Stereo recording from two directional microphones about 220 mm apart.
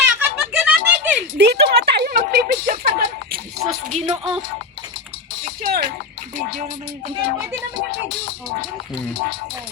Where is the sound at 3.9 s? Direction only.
25° right (ahead or behind).